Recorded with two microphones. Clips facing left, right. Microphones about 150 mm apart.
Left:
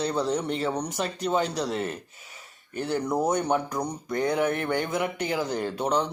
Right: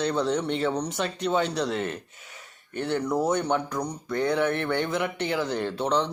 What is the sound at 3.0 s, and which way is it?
Speech, 20° left (ahead or behind).